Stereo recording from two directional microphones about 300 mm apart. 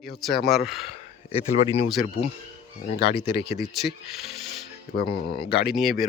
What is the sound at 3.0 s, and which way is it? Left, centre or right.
Speech, left.